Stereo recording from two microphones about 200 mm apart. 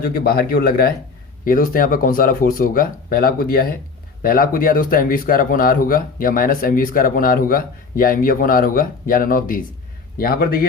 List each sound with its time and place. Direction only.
0.0 s speech: 50° left (ahead or behind)